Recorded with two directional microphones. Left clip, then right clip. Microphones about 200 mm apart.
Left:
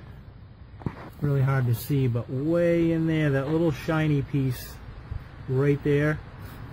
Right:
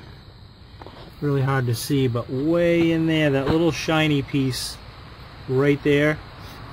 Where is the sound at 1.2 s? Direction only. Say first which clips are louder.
Right 6 dB; 25° right (ahead or behind).